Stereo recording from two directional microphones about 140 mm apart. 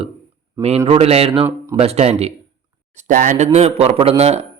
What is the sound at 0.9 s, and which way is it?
A man's voice, 45° right (ahead or behind).